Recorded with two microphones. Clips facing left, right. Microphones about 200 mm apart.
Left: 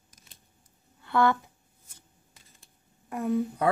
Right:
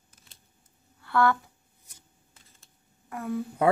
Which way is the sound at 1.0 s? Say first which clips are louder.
Even; 20° left (ahead or behind).